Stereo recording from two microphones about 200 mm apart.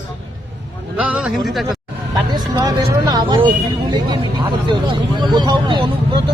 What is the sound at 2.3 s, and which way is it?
Speech, 20° right (ahead or behind).